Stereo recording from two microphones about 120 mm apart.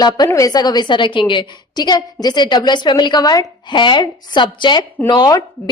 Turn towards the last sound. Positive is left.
turn(degrees=35)  # may be behind; listen again after turning